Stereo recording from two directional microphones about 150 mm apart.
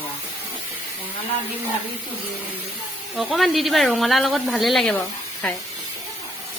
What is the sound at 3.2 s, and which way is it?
Speech, centre (ahead or behind).